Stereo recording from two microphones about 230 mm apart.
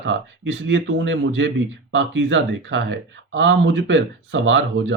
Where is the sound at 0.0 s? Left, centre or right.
Right.